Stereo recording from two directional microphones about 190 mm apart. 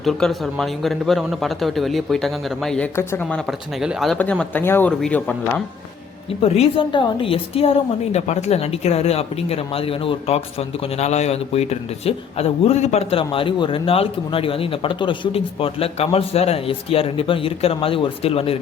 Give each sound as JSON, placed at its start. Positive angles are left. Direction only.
{"t": 0.0, "sound": "a man's voice", "side_deg": 0}
{"t": 6.4, "sound": "a woman's voice", "side_deg": 30}